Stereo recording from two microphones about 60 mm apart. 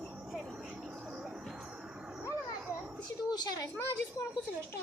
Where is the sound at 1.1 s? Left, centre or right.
Centre.